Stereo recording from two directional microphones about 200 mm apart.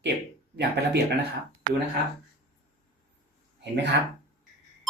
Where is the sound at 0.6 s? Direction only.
55° right (ahead or behind).